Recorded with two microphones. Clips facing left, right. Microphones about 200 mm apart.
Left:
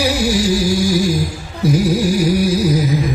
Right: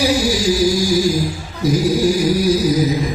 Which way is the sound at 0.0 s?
65° left (ahead or behind).